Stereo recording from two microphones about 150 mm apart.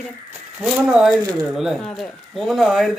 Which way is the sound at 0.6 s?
5° right (ahead or behind).